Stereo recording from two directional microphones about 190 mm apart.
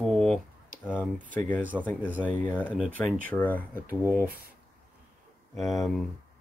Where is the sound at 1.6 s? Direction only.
10° right (ahead or behind).